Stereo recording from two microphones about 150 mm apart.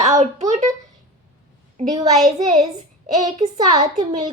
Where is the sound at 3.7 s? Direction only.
25° right (ahead or behind).